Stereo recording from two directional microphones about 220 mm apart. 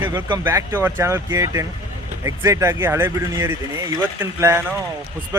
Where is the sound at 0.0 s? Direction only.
15° right (ahead or behind).